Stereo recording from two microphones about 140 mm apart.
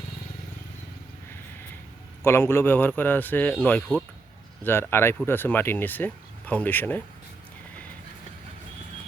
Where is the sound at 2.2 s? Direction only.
15° left (ahead or behind).